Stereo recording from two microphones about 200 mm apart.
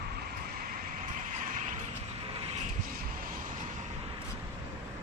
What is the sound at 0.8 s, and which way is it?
Vehicle, 40° right (ahead or behind).